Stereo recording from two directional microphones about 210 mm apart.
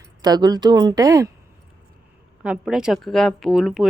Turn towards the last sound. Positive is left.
turn(degrees=0)  # may be behind; listen again after turning